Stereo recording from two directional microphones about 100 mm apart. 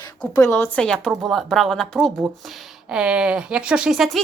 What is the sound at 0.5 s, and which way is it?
Speech, 20° left (ahead or behind).